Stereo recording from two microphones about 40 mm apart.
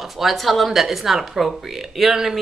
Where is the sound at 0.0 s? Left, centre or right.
Centre.